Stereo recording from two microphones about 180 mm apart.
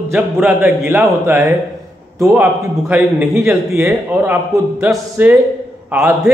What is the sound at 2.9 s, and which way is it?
A man's voice, 10° right (ahead or behind).